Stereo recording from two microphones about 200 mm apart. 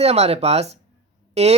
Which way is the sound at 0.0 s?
30° right (ahead or behind).